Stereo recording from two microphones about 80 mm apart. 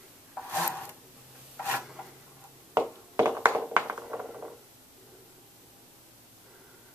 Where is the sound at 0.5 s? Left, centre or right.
Centre.